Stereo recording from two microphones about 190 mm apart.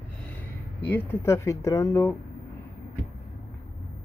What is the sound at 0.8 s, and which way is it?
Speech, 10° left (ahead or behind).